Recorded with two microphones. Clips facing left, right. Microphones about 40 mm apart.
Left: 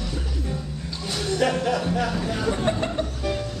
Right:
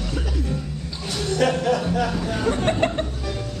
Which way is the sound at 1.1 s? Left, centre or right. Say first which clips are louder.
Right 2 dB; centre.